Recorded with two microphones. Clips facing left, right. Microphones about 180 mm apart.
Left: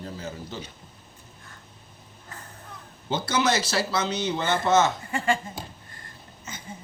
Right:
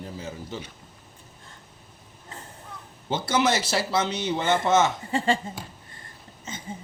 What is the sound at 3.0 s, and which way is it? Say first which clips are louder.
Speech: right 1 dB; 25° right (ahead or behind).